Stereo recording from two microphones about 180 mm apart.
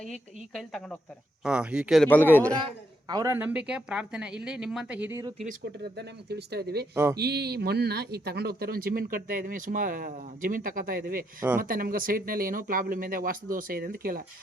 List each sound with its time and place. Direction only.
0.5 s speech: centre (ahead or behind)
2.0 s a man's voice: 10° left (ahead or behind)
3.1 s speech: 15° right (ahead or behind)
5.7 s speech: 65° right (ahead or behind)
6.9 s speech: 15° right (ahead or behind)
7.2 s a man's voice: 65° right (ahead or behind)